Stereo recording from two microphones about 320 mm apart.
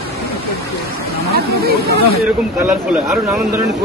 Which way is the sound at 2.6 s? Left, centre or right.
Centre.